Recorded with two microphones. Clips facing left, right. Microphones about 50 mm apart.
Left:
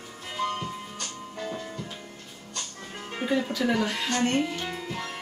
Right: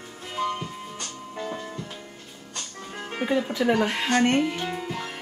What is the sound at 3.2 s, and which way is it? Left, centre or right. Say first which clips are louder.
Speech: right 2 dB; right.